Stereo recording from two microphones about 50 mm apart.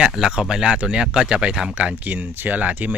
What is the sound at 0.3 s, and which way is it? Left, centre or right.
Speech, centre.